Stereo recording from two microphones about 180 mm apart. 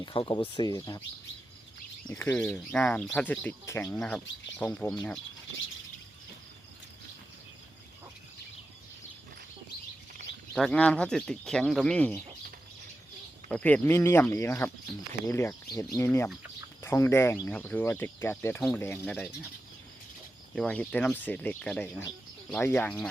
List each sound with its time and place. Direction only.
0.0 s speech: 25° left (ahead or behind)
2.0 s speech: 10° left (ahead or behind)
10.5 s speech: 5° left (ahead or behind)
13.5 s speech: 5° left (ahead or behind)
20.6 s speech: 5° left (ahead or behind)